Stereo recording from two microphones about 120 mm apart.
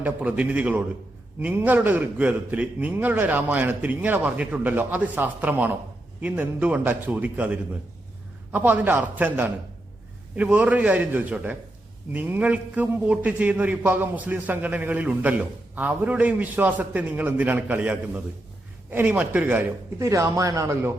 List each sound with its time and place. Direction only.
0.0 s a man's voice: 10° right (ahead or behind)
20.0 s speech: 25° right (ahead or behind)